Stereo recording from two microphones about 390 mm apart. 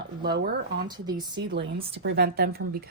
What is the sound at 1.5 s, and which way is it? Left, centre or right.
Speech, right.